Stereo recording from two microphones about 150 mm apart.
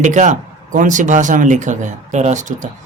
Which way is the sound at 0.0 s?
55° right (ahead or behind).